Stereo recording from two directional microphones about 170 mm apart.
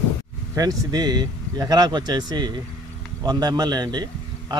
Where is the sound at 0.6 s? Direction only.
20° right (ahead or behind).